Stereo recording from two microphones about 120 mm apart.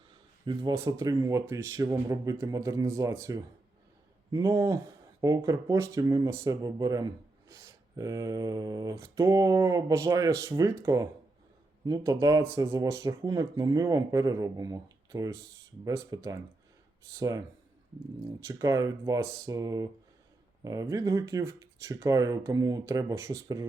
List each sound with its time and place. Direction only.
0.5 s speech: 35° right (ahead or behind)
0.9 s speech: 25° right (ahead or behind)